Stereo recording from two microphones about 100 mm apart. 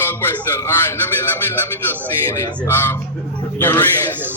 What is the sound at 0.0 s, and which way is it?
Speech, 20° left (ahead or behind).